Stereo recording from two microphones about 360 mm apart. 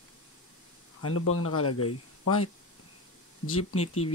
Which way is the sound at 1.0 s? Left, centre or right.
Left.